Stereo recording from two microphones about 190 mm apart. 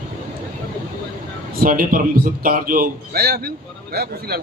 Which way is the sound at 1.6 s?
50° right (ahead or behind).